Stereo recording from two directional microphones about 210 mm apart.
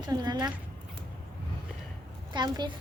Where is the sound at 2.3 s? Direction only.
20° right (ahead or behind).